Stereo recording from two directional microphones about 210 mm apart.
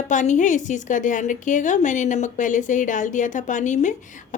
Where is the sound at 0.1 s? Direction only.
35° left (ahead or behind).